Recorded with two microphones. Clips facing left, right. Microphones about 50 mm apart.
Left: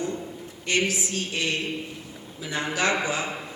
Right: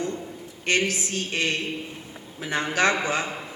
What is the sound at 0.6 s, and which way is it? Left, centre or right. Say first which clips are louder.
A man's voice: right 1 dB; right.